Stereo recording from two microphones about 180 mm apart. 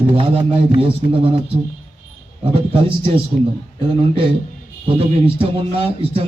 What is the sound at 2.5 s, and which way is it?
Speech, 30° right (ahead or behind).